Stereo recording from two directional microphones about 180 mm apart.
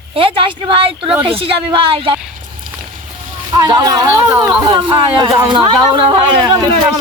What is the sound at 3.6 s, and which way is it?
Speech, 20° right (ahead or behind).